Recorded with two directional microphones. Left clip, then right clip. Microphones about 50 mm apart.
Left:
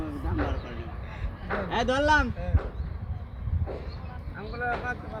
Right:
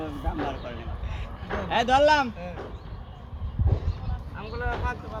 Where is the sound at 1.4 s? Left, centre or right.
Right.